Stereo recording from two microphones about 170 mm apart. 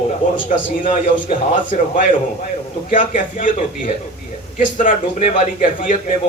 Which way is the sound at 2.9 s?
50° left (ahead or behind).